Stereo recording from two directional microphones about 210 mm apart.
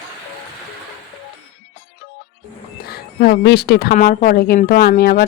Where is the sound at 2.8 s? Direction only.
50° left (ahead or behind).